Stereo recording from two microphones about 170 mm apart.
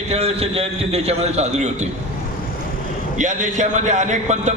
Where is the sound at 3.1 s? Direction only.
45° right (ahead or behind).